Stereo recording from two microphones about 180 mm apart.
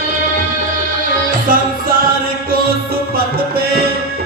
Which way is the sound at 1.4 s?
50° right (ahead or behind).